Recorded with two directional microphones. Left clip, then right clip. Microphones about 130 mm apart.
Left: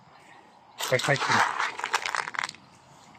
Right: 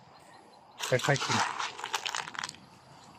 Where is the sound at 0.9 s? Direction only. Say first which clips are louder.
Left 3 dB; 20° right (ahead or behind).